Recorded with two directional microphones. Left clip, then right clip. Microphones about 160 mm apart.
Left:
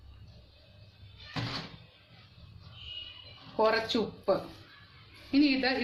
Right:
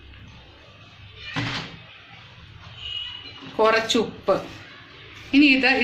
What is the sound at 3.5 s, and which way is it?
A woman's voice, 30° left (ahead or behind).